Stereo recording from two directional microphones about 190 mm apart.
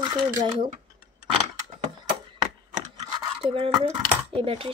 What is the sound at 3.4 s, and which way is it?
Speech, 30° right (ahead or behind).